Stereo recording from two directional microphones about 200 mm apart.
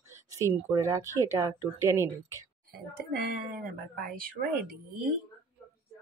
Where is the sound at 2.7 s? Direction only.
50° right (ahead or behind).